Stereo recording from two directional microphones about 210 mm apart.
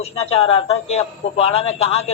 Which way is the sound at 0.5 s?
30° left (ahead or behind).